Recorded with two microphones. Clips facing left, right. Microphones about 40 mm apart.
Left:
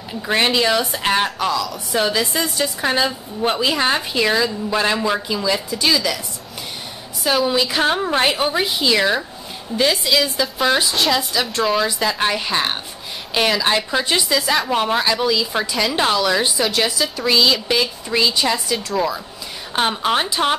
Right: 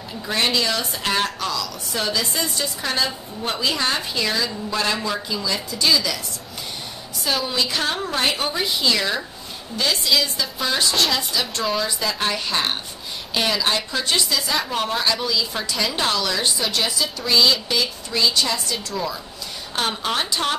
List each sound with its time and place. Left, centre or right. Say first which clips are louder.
0.3 s a woman's voice: left 5 dB; left
2.3 s speech: left 4 dB; centre
2.8 s a woman's voice: left 5 dB; left
7.2 s a woman's voice: left 5 dB; centre
12.2 s speech: left 3 dB; centre
13.7 s speech: left 4 dB; centre
14.4 s speech: left 5 dB; centre
14.7 s speech: left 4 dB; centre
16.5 s speech: left 4 dB; centre
17.6 s a woman's voice: left 4 dB; left
19.9 s speech: left 4 dB; centre